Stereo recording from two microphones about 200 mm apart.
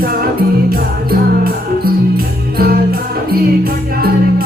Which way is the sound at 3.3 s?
50° right (ahead or behind).